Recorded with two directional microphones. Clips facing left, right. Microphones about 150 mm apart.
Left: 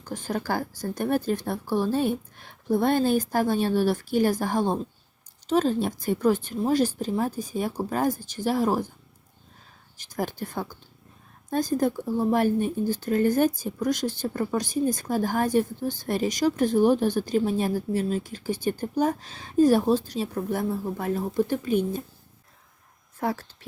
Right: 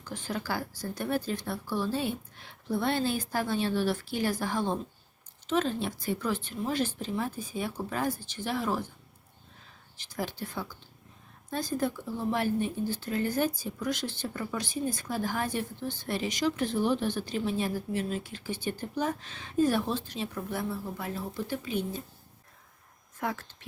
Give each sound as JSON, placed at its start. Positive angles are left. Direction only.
{"t": 0.0, "sound": "speech", "side_deg": 45}
{"t": 10.0, "sound": "speech", "side_deg": 45}
{"t": 23.2, "sound": "speech", "side_deg": 35}